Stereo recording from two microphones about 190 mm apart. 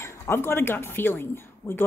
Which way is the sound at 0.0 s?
15° left (ahead or behind).